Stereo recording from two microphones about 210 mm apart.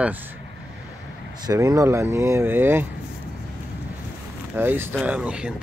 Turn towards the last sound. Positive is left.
turn(degrees=-5)  # may be behind; listen again after turning